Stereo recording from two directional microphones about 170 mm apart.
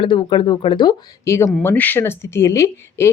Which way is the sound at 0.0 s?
30° left (ahead or behind).